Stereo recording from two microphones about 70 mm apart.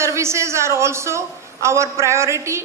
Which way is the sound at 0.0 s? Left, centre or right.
Right.